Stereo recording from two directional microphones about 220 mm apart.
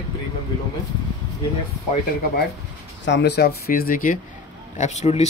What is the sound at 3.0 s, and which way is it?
Speech, 50° left (ahead or behind).